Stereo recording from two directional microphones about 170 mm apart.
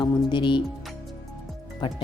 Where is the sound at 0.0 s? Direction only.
25° left (ahead or behind).